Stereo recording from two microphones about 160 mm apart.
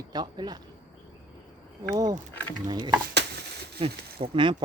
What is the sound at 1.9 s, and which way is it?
Speech, 25° right (ahead or behind).